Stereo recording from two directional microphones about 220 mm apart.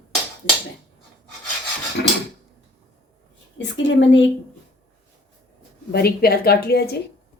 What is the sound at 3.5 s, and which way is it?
Speech, 55° left (ahead or behind).